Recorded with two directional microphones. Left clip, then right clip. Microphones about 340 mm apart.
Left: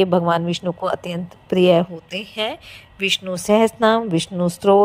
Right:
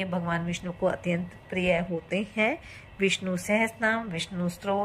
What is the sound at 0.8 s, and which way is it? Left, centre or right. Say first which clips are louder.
Speech: even; centre.